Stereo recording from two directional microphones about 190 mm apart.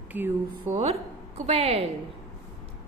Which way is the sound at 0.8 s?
35° right (ahead or behind).